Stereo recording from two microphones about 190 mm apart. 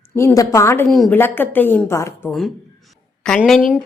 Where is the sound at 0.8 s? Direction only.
Centre (ahead or behind).